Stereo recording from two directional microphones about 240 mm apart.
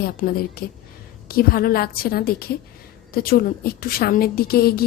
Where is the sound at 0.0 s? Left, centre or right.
Left.